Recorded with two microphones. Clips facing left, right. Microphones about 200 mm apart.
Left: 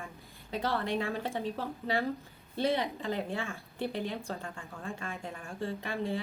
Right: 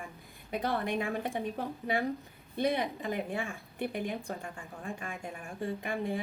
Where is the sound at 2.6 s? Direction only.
15° right (ahead or behind).